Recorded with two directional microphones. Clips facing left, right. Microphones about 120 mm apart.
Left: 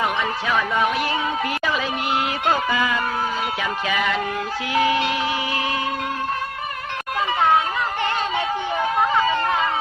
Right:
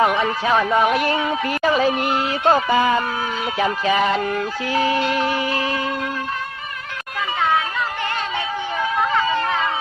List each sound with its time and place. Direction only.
0.0 s a man's voice: 45° right (ahead or behind)
0.9 s a man's voice: 50° right (ahead or behind)
1.6 s music: 40° right (ahead or behind)
4.7 s a man's voice: 40° right (ahead or behind)